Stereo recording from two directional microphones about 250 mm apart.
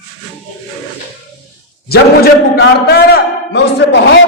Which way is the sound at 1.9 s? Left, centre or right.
Left.